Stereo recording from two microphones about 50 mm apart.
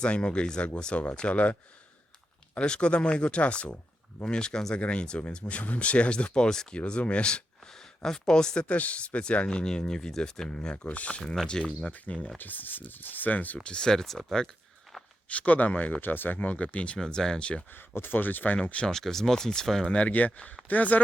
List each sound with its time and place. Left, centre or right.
0.0 s speech: centre
2.6 s speech: centre
8.6 s speech: left
10.8 s speech: left
11.2 s speech: centre
11.9 s speech: left
13.6 s speech: centre
14.9 s walk: centre
15.3 s speech: left
17.0 s speech: centre
17.7 s speech: left
18.9 s speech: centre
19.9 s speech: left